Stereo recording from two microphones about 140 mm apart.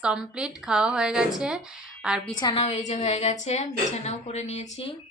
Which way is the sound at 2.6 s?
55° left (ahead or behind).